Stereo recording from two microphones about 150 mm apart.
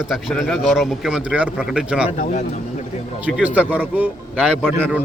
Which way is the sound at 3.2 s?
10° right (ahead or behind).